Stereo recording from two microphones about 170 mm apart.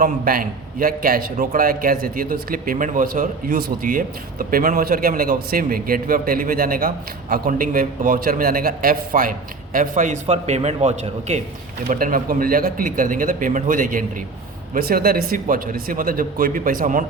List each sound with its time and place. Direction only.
0.0 s a man's voice: 55° right (ahead or behind); by 11.3 s 40° right (ahead or behind)
11.9 s a man's voice: 55° right (ahead or behind)